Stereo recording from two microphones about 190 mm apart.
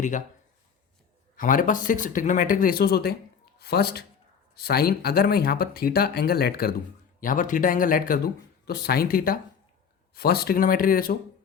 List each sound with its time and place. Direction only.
1.4 s speech: 45° left (ahead or behind)